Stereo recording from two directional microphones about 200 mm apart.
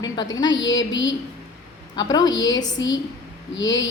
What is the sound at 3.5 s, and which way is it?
Speech, 65° left (ahead or behind).